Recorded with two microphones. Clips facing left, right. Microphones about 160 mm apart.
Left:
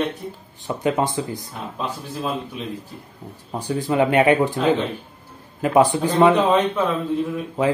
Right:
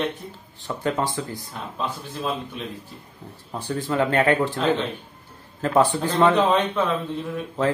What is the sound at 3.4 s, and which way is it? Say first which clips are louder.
Speech: left 3 dB; 15° left (ahead or behind).